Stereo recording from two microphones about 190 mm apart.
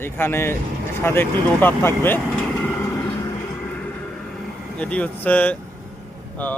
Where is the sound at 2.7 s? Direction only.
15° left (ahead or behind).